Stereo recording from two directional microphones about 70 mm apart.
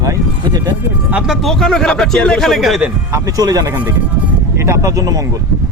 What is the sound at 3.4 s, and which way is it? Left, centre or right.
Speech, right.